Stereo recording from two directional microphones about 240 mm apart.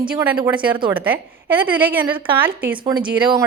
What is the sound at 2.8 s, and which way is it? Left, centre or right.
Speech, centre.